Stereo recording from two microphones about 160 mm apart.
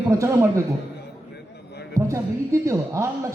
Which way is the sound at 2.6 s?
20° right (ahead or behind).